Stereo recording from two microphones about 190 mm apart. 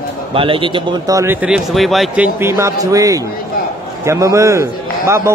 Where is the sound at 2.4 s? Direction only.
15° right (ahead or behind).